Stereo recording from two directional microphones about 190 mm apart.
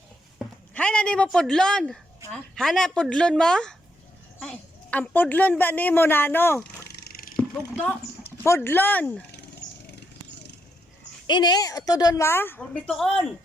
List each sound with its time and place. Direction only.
0.3 s a woman's voice: 5° left (ahead or behind)
6.7 s a sound: 55° left (ahead or behind)
7.3 s speech: 5° left (ahead or behind)
11.3 s a woman's voice: 25° left (ahead or behind); by 13.3 s centre (ahead or behind)